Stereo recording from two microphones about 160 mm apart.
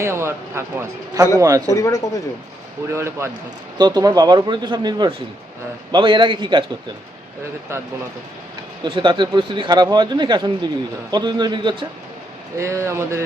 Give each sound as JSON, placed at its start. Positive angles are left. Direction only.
{"t": 0.0, "sound": "a man's voice", "side_deg": -15}
{"t": 1.7, "sound": "speech", "side_deg": 20}
{"t": 2.9, "sound": "a man's voice", "side_deg": -15}
{"t": 8.8, "sound": "speech", "side_deg": -30}
{"t": 12.5, "sound": "a man's voice", "side_deg": -20}